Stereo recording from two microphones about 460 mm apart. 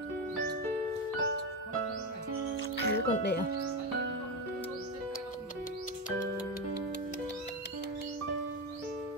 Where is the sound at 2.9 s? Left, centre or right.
Left.